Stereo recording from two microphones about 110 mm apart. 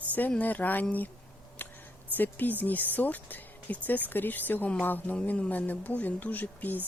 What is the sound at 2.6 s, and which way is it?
Speech, 15° left (ahead or behind).